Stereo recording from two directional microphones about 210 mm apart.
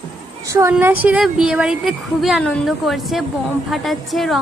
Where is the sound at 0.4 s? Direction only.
15° right (ahead or behind).